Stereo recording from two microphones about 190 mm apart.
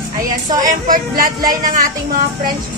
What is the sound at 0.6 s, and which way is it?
Speech, 45° right (ahead or behind).